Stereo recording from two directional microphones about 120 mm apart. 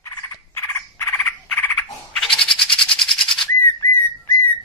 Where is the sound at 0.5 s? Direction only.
20° left (ahead or behind).